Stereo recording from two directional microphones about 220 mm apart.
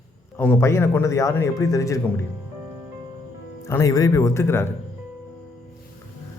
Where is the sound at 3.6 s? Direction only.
15° left (ahead or behind).